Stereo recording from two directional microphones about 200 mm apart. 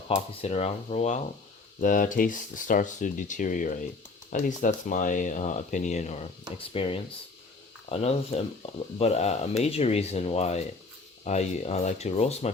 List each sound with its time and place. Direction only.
0.1 s speech: 30° left (ahead or behind)